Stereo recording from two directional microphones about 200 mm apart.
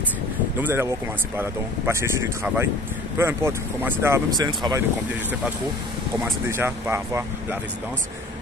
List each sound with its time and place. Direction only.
0.6 s speech: 10° right (ahead or behind)
6.5 s speech: 10° right (ahead or behind)